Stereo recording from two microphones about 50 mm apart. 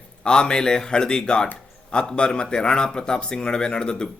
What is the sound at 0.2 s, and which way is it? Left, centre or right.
A man's voice, centre.